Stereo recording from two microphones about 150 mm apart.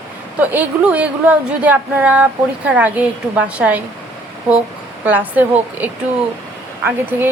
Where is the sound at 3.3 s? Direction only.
10° right (ahead or behind).